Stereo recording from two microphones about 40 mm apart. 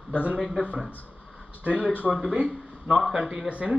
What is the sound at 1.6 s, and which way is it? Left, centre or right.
Speech, right.